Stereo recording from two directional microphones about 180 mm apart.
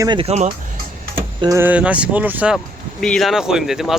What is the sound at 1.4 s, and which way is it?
Speech, 15° right (ahead or behind).